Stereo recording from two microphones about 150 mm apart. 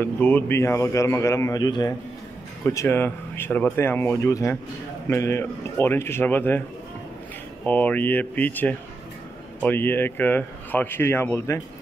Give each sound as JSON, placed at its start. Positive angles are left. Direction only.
{"t": 0.0, "sound": "a man's voice", "side_deg": 15}
{"t": 7.6, "sound": "speech", "side_deg": 10}